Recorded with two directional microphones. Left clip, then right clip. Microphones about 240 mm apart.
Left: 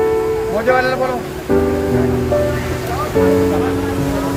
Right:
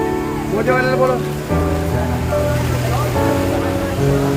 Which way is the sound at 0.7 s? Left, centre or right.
Left.